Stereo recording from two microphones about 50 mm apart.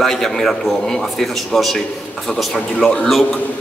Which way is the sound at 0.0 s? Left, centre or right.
Centre.